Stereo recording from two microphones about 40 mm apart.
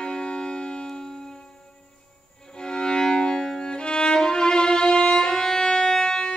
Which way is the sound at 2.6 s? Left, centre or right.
Centre.